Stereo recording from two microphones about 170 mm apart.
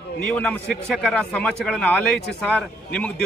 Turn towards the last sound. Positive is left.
turn(degrees=5)  # may be behind; listen again after turning